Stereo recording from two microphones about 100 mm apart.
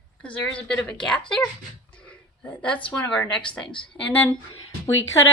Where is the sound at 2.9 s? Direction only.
10° left (ahead or behind).